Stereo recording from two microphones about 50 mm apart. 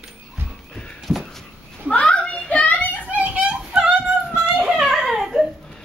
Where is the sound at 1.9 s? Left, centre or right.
Left.